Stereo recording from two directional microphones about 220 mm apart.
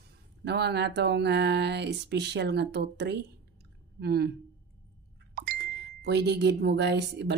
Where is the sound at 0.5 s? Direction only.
50° right (ahead or behind).